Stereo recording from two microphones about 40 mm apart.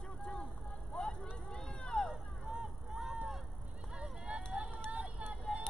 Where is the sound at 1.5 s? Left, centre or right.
Centre.